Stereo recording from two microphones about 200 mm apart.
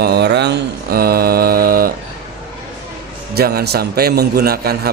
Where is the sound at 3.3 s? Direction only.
50° right (ahead or behind).